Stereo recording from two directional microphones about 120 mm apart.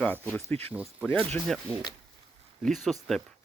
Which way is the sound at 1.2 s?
5° left (ahead or behind).